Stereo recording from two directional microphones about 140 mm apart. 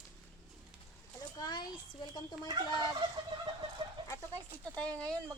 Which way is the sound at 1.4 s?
30° left (ahead or behind).